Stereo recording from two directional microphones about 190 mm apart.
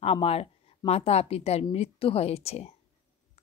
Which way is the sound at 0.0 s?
30° left (ahead or behind).